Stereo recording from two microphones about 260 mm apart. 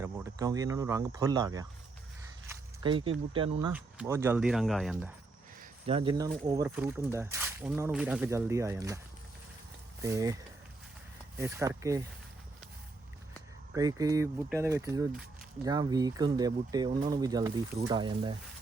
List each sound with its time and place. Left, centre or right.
0.0 s speech: centre
3.7 s speech: centre
5.8 s speech: right
6.7 s speech: centre
10.0 s speech: centre
11.3 s speech: centre
13.7 s speech: centre